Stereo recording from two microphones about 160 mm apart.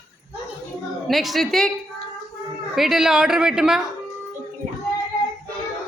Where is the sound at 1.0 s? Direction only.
Centre (ahead or behind).